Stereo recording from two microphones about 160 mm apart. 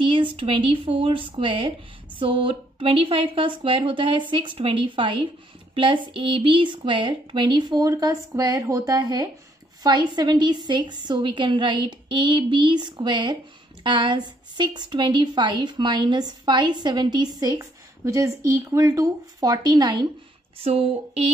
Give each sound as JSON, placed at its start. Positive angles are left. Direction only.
{"t": 0.0, "sound": "a woman's voice", "side_deg": -30}
{"t": 20.5, "sound": "a woman's voice", "side_deg": -40}